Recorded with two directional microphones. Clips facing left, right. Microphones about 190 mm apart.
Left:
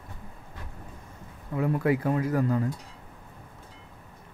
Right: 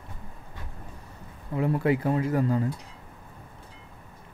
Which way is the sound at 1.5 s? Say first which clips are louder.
Right 1 dB; 25° right (ahead or behind).